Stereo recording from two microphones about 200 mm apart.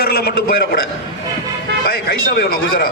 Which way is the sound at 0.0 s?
50° left (ahead or behind).